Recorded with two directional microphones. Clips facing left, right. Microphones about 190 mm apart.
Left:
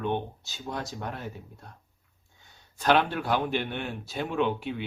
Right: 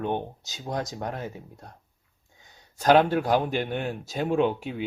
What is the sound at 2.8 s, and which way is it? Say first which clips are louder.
Speech: right 5 dB; 40° right (ahead or behind).